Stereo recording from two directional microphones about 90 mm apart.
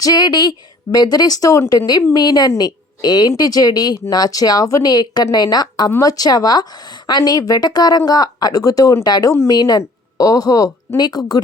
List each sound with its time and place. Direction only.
0.0 s a woman's voice: 50° left (ahead or behind)
2.1 s a woman's voice: 50° left (ahead or behind)
9.0 s a woman's voice: 50° left (ahead or behind)